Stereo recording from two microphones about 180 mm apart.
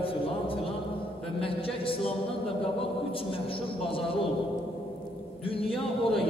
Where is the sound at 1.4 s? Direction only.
30° left (ahead or behind).